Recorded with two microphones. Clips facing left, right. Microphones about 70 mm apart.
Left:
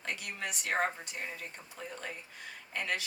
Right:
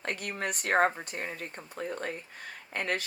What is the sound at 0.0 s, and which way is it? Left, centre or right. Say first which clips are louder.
Speech: right 5 dB; right.